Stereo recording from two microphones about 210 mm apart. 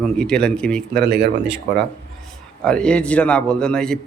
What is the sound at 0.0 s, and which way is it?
Speech, 5° left (ahead or behind).